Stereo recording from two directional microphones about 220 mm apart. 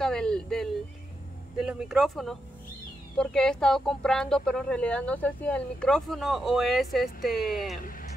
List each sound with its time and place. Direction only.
0.0 s a sound: 5° left (ahead or behind)
1.6 s speech: 5° right (ahead or behind)
7.3 s speech: 40° left (ahead or behind)